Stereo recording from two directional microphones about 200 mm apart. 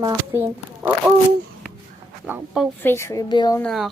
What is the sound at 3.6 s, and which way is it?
Speech, centre (ahead or behind).